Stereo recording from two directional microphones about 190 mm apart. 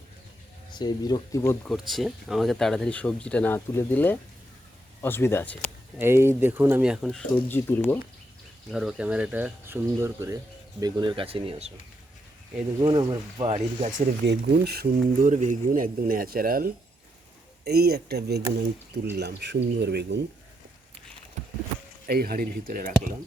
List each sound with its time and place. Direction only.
0.7 s speech: 20° left (ahead or behind)
1.6 s speech: centre (ahead or behind)
6.0 s speech: 15° right (ahead or behind); by 7.9 s 10° left (ahead or behind)
8.7 s speech: 5° right (ahead or behind); by 11.7 s 30° right (ahead or behind)
12.8 s speech: 20° right (ahead or behind)
14.3 s speech: 60° right (ahead or behind)
15.3 s speech: 40° right (ahead or behind); by 20.2 s 65° right (ahead or behind)
22.0 s speech: 50° right (ahead or behind)